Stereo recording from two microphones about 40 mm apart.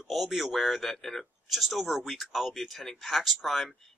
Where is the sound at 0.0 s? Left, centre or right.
Centre.